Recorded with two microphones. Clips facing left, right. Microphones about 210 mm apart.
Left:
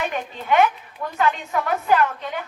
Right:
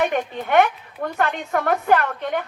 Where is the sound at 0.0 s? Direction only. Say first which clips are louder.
Right 5 dB; 60° right (ahead or behind).